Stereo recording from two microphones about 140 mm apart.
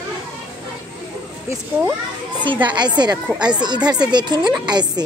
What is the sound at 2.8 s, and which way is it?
Speech, 30° right (ahead or behind).